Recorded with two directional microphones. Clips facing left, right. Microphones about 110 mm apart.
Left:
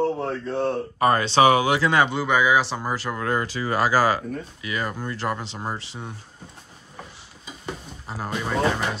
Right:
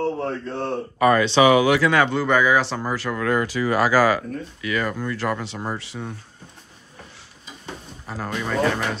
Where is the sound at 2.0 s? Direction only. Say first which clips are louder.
Right 2 dB; 10° left (ahead or behind).